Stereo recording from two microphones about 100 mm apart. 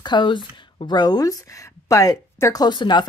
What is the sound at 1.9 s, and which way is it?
Speech, 35° left (ahead or behind).